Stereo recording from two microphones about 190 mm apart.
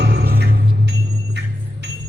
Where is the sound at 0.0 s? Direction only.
60° right (ahead or behind).